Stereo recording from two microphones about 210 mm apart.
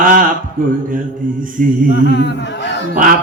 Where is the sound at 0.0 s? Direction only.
40° right (ahead or behind).